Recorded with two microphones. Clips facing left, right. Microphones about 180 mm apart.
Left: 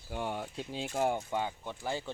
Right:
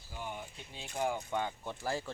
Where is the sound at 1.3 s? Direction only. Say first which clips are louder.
Left 1 dB; 10° left (ahead or behind).